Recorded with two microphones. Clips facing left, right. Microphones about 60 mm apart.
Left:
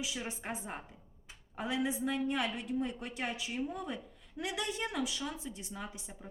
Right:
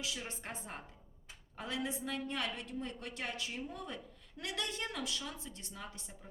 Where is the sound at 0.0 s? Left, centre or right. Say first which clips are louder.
Left 3 dB; centre.